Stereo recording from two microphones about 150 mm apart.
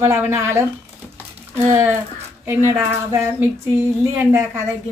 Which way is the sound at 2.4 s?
15° right (ahead or behind).